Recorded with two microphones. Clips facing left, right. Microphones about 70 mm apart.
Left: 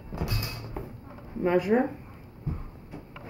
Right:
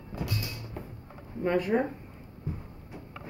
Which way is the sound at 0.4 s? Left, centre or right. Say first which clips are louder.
Left 1 dB; left.